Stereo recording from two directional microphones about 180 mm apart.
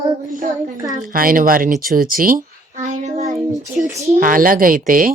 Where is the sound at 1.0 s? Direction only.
55° right (ahead or behind).